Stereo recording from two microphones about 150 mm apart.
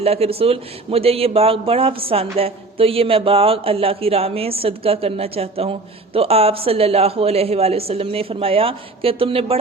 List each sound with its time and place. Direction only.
0.0 s a man's voice: 40° right (ahead or behind)